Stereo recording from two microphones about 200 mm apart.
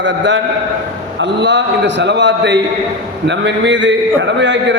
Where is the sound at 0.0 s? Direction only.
65° right (ahead or behind).